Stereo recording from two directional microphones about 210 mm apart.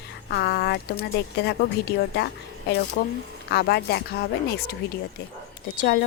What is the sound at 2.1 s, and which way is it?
Speech, 50° left (ahead or behind).